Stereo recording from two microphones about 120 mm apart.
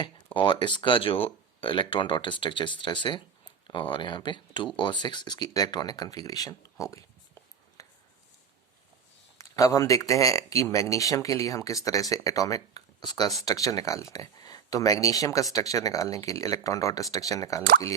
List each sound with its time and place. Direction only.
0.3 s speech: 40° left (ahead or behind)
7.8 s a sound: 25° left (ahead or behind)
9.4 s speech: 30° left (ahead or behind)